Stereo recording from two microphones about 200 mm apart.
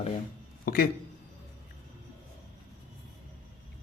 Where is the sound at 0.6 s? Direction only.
45° left (ahead or behind).